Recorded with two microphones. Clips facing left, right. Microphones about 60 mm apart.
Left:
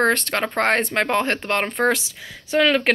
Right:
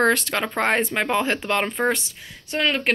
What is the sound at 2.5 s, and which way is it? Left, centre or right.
Speech, left.